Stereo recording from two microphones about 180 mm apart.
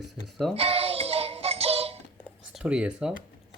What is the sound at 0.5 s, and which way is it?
Music, 35° right (ahead or behind).